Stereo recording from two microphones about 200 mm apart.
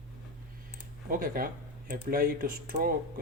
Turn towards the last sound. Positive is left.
turn(degrees=-45)  # may be behind; listen again after turning